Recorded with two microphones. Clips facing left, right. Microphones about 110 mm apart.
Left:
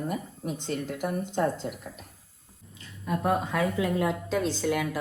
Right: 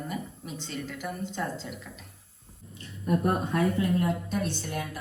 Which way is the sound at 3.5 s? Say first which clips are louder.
Right 1 dB; 90° left.